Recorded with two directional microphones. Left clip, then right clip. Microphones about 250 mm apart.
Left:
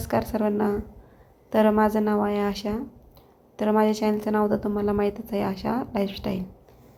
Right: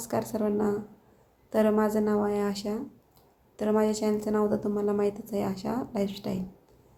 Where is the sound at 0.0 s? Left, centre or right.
Centre.